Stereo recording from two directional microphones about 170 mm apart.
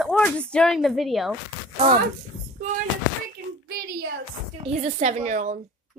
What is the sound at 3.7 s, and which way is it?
Speech, 60° right (ahead or behind).